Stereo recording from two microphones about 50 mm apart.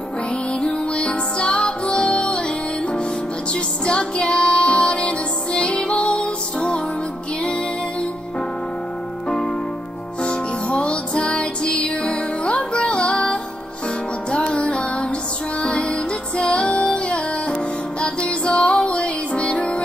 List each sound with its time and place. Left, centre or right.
0.6 s music: centre
3.5 s music: centre
10.2 s music: left